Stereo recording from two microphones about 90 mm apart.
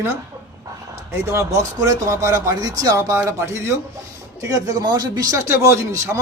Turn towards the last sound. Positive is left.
turn(degrees=-35)  # may be behind; listen again after turning